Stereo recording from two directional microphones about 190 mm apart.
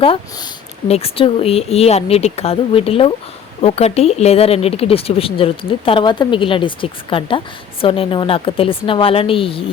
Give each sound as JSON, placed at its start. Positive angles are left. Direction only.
{"t": 0.9, "sound": "speech", "side_deg": 30}